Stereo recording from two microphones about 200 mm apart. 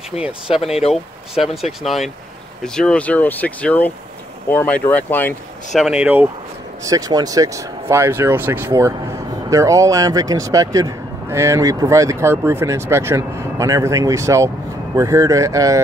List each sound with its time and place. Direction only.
0.1 s speech: 30° left (ahead or behind)
1.4 s speech: centre (ahead or behind)
5.8 s speech: 5° right (ahead or behind)